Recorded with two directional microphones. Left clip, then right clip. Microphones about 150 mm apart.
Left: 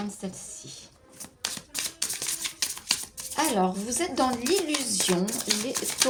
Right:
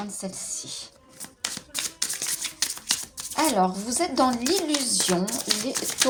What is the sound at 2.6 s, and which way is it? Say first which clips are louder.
Speech: right 2 dB; 25° right (ahead or behind).